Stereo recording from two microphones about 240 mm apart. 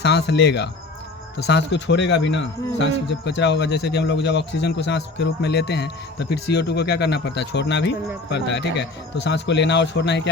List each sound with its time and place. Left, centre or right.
0.0 s speech: left